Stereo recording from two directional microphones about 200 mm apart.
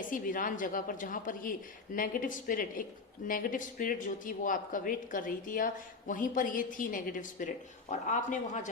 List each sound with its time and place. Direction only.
0.1 s speech: 45° left (ahead or behind)